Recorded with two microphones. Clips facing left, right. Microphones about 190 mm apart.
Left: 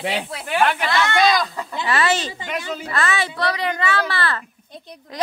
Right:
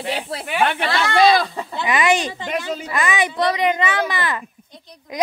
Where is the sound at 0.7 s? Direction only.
30° right (ahead or behind).